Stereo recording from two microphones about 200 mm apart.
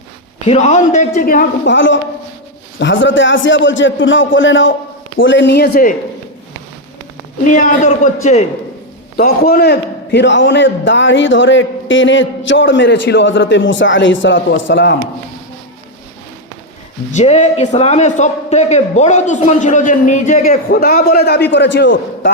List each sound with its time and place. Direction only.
0.4 s a man's voice: 35° left (ahead or behind)
1.6 s a man's voice: 65° left (ahead or behind); by 5.9 s 50° left (ahead or behind)
7.4 s a man's voice: 40° left (ahead or behind)
9.1 s a man's voice: 50° left (ahead or behind); by 14.9 s 65° left (ahead or behind)
17.1 s a man's voice: 35° left (ahead or behind); by 22.3 s 60° left (ahead or behind)